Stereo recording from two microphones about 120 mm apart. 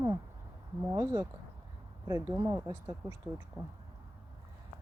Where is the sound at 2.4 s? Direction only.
25° right (ahead or behind).